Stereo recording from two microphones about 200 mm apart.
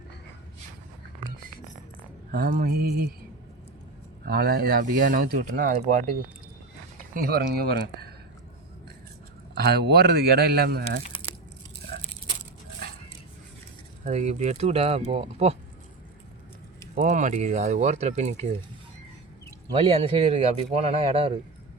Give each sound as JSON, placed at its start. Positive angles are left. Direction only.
{"t": 2.3, "sound": "speech", "side_deg": -50}
{"t": 4.3, "sound": "speech", "side_deg": -50}
{"t": 7.1, "sound": "speech", "side_deg": -50}
{"t": 9.6, "sound": "speech", "side_deg": -50}
{"t": 14.0, "sound": "speech", "side_deg": -35}
{"t": 16.9, "sound": "speech", "side_deg": -40}
{"t": 19.7, "sound": "speech", "side_deg": -30}